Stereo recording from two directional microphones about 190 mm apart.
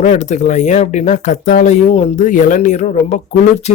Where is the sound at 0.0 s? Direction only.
40° left (ahead or behind).